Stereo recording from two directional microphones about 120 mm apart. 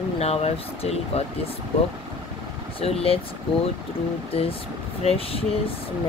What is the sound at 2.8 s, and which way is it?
Speech, 55° left (ahead or behind).